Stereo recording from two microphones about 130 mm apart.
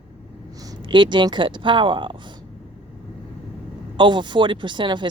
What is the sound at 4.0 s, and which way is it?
Speech, 35° right (ahead or behind).